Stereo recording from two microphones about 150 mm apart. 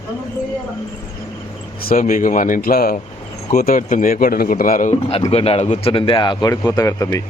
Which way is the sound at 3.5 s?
65° left (ahead or behind).